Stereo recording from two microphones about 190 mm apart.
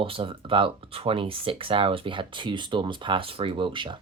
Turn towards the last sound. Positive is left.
turn(degrees=-25)  # may be behind; listen again after turning